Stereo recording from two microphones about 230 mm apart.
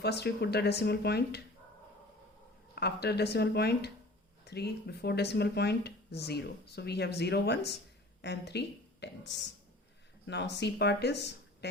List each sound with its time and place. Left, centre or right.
0.0 s speech: left
2.7 s a woman's voice: left